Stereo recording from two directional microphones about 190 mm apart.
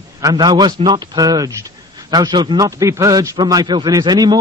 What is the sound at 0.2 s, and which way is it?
A man's voice, 20° right (ahead or behind).